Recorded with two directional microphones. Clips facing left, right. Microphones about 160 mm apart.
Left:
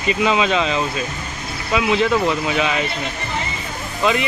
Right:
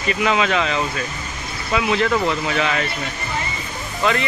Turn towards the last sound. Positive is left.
turn(degrees=20)  # may be behind; listen again after turning